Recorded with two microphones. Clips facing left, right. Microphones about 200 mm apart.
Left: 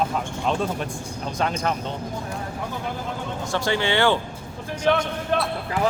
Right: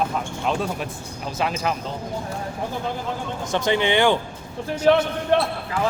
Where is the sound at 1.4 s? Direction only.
5° right (ahead or behind).